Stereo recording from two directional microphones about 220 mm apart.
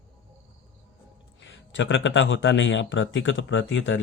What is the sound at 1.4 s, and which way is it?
A man's voice, 55° left (ahead or behind).